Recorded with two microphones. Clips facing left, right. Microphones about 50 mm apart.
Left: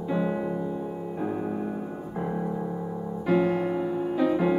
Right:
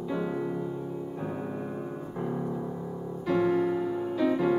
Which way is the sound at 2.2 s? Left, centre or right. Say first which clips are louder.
Left 3 dB; centre.